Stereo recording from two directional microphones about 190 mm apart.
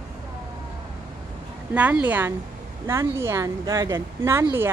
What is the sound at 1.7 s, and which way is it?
A woman's voice, 10° right (ahead or behind).